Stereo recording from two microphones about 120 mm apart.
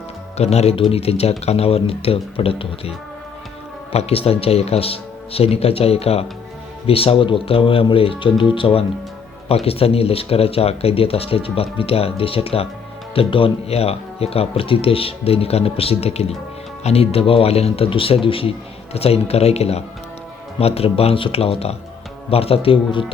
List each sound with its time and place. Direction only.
0.3 s speech: 65° left (ahead or behind)
3.9 s speech: 55° left (ahead or behind)